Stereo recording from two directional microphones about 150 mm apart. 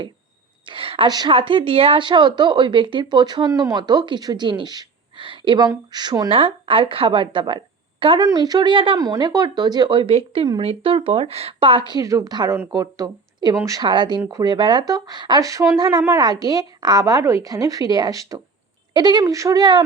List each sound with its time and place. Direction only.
0.6 s a woman's voice: 35° right (ahead or behind)